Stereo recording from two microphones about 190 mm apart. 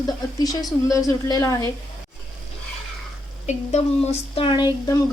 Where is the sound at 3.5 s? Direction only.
35° left (ahead or behind).